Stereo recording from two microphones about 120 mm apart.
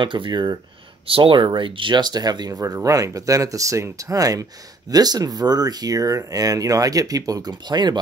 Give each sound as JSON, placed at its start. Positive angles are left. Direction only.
{"t": 0.0, "sound": "speech", "side_deg": -45}